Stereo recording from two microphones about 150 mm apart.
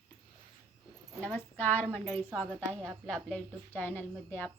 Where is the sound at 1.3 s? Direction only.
10° left (ahead or behind).